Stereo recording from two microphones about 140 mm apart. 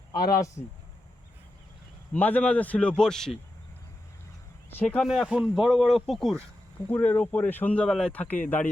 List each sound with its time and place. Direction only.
0.1 s speech: 25° left (ahead or behind)
2.1 s speech: 10° left (ahead or behind)
4.8 s speech: 10° left (ahead or behind)
5.0 s speech: centre (ahead or behind)
6.9 s speech: 10° left (ahead or behind)